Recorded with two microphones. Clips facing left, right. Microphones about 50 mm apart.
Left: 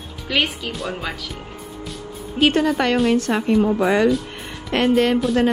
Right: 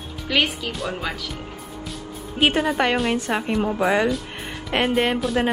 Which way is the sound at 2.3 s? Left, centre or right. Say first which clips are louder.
Left 2 dB; centre.